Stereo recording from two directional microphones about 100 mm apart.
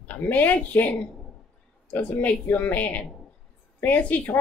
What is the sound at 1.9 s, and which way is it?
A woman's voice, 15° left (ahead or behind).